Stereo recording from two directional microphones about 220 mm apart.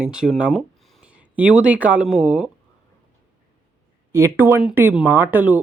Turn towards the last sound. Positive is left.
turn(degrees=-5)  # may be behind; listen again after turning